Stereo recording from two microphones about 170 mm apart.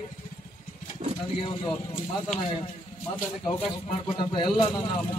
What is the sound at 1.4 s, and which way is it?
Speech, 30° left (ahead or behind).